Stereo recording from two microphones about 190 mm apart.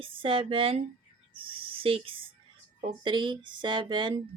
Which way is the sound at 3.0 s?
25° right (ahead or behind).